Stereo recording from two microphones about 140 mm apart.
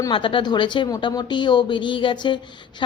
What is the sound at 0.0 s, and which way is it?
Speech, 35° left (ahead or behind).